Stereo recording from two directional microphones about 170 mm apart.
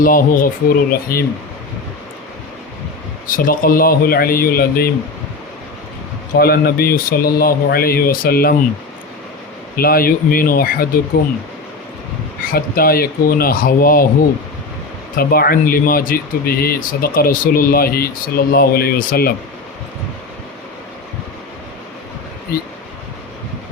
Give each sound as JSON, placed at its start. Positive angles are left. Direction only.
{"t": 0.0, "sound": "speech", "side_deg": 55}
{"t": 3.2, "sound": "speech", "side_deg": 55}
{"t": 6.3, "sound": "speech", "side_deg": 65}
{"t": 9.7, "sound": "speech", "side_deg": 60}
{"t": 12.5, "sound": "speech", "side_deg": 60}
{"t": 15.1, "sound": "speech", "side_deg": 60}
{"t": 22.5, "sound": "speech", "side_deg": 60}